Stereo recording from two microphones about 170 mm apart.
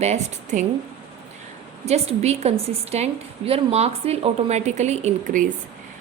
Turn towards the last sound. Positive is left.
turn(degrees=-45)  # may be behind; listen again after turning